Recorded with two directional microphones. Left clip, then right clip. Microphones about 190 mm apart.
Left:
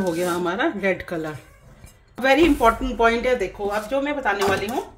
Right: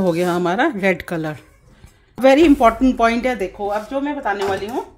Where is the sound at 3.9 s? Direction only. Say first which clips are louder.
Right 1 dB; 15° right (ahead or behind).